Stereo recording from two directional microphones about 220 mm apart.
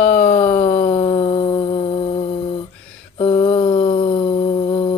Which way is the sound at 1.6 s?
25° left (ahead or behind).